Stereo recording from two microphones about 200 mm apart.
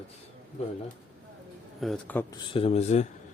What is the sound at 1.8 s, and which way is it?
Speech, centre (ahead or behind).